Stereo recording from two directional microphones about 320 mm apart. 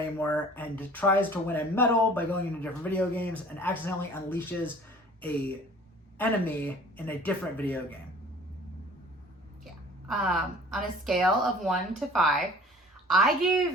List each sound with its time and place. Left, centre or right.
0.0 s a woman's voice: centre
6.1 s a woman's voice: centre
10.1 s a woman's voice: centre